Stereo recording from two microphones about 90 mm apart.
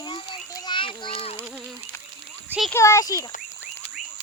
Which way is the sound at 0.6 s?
65° left (ahead or behind).